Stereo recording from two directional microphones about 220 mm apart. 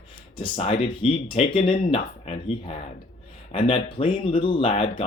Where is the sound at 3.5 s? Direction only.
25° left (ahead or behind).